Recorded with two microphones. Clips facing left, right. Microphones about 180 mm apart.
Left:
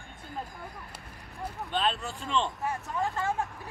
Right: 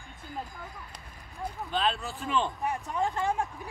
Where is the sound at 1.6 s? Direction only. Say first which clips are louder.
Even; centre (ahead or behind).